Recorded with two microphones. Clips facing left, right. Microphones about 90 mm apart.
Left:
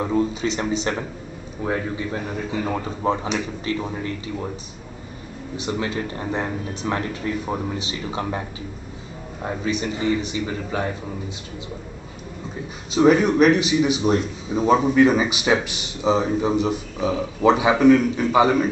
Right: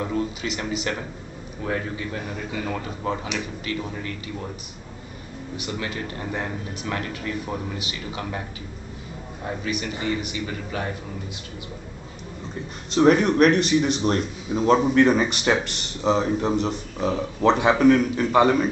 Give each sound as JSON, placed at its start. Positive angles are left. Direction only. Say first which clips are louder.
{"t": 0.0, "sound": "speech", "louder": "left 5 dB", "side_deg": 25}
{"t": 5.6, "sound": "speech", "louder": "left 5 dB", "side_deg": 25}
{"t": 9.7, "sound": "speech", "louder": "left 5 dB", "side_deg": 25}
{"t": 12.9, "sound": "speech", "louder": "left 1 dB", "side_deg": 5}